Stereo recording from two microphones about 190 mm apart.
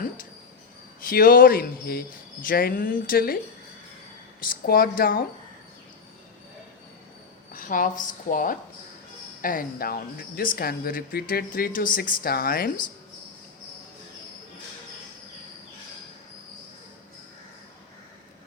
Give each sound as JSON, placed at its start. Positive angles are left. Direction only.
{"t": 1.0, "sound": "speech", "side_deg": 50}
{"t": 4.4, "sound": "speech", "side_deg": 50}
{"t": 7.5, "sound": "a woman's voice", "side_deg": 45}